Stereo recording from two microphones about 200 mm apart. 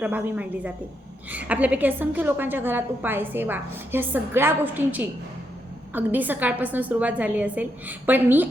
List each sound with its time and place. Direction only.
0.0 s a woman's voice: 5° right (ahead or behind)